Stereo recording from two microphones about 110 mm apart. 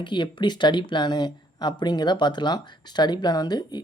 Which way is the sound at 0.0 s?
45° left (ahead or behind).